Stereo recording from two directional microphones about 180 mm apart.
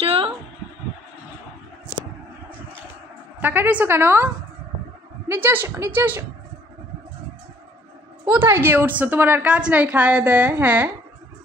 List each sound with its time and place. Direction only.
0.0 s a sound: 30° right (ahead or behind)
3.3 s a woman's voice: 10° right (ahead or behind)
5.3 s a woman's voice: 10° right (ahead or behind)
8.3 s a woman's voice: 10° right (ahead or behind)